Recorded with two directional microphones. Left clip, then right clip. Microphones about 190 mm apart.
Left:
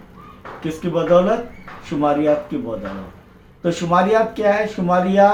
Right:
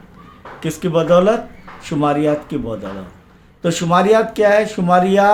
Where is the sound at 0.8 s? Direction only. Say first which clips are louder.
Right 4 dB; 55° right (ahead or behind).